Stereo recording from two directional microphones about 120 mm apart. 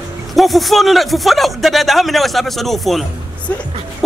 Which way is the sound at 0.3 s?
Centre (ahead or behind).